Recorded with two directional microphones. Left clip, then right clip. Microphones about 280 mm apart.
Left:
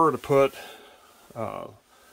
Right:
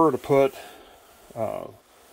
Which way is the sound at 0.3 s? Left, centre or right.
Centre.